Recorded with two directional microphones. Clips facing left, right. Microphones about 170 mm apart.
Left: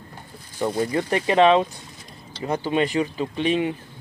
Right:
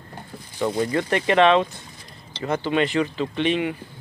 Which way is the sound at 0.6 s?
15° left (ahead or behind).